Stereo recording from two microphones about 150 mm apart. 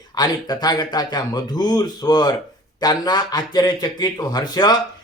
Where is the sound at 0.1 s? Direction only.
25° left (ahead or behind).